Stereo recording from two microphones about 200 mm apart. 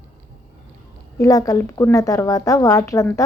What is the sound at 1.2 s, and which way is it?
A woman's voice, 15° left (ahead or behind).